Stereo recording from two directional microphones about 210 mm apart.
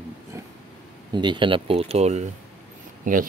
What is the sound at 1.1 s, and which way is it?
Speech, 20° right (ahead or behind).